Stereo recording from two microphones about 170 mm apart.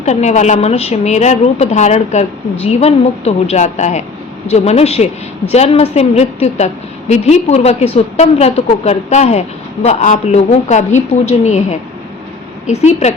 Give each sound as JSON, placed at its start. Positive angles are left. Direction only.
{"t": 0.0, "sound": "a woman's voice", "side_deg": 40}